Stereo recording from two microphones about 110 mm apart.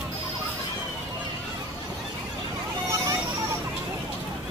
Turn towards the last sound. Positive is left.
turn(degrees=-30)  # may be behind; listen again after turning